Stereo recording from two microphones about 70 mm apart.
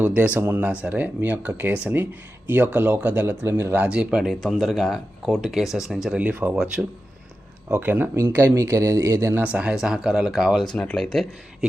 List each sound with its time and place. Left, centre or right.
0.0 s speech: centre; by 3.8 s right
3.8 s speech: centre
4.4 s speech: centre
6.1 s speech: right
7.7 s speech: right
9.4 s speech: centre
10.7 s speech: centre